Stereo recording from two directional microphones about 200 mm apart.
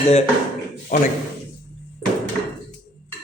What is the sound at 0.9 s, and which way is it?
Speech, 45° left (ahead or behind).